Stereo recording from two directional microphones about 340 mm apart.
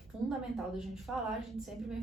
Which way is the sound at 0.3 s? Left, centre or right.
Centre.